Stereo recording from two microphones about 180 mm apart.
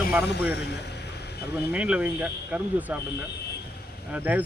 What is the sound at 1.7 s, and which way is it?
Speech, 5° right (ahead or behind).